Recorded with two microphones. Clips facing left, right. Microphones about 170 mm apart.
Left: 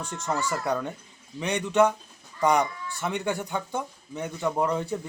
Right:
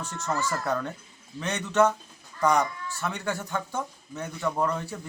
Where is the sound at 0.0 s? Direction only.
15° left (ahead or behind).